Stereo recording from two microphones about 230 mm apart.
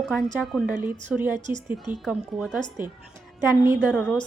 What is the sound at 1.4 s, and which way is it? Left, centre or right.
Speech, right.